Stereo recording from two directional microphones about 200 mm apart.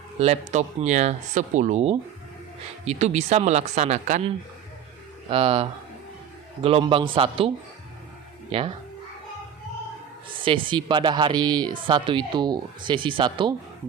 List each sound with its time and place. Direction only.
0.2 s speech: 35° right (ahead or behind)
10.3 s speech: 25° right (ahead or behind)